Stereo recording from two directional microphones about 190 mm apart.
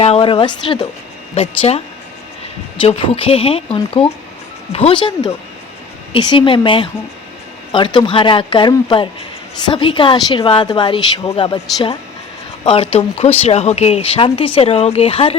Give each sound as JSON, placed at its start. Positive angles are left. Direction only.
{"t": 0.0, "sound": "a woman's voice", "side_deg": 30}
{"t": 2.8, "sound": "a woman's voice", "side_deg": 30}
{"t": 7.9, "sound": "a woman's voice", "side_deg": 25}